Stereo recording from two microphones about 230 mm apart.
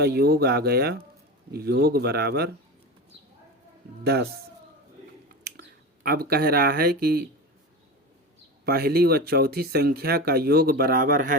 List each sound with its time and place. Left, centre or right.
0.0 s speech: right
4.0 s speech: right
5.5 s speech: right
8.6 s speech: right